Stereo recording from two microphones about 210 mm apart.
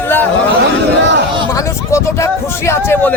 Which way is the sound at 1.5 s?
15° left (ahead or behind).